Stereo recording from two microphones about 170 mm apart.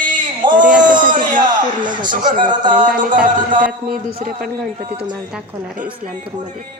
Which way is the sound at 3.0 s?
50° right (ahead or behind).